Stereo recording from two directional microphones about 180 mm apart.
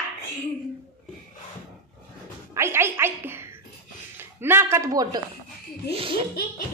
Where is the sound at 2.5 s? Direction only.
15° right (ahead or behind).